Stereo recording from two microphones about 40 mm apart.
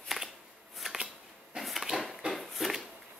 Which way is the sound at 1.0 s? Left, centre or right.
Centre.